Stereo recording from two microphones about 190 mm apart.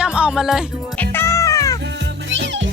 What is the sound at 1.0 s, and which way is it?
Music, 15° left (ahead or behind).